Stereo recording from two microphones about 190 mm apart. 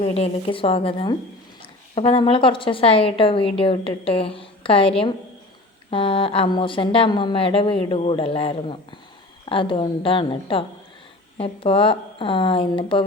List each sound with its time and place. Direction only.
0.0 s a woman's voice: 30° left (ahead or behind)